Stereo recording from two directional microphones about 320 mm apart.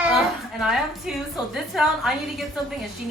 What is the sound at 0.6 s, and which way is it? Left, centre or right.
A woman's voice, centre.